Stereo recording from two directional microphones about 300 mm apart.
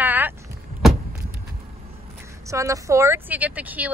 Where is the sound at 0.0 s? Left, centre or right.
Centre.